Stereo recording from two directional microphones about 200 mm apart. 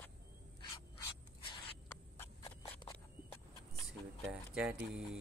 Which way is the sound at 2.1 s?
20° left (ahead or behind).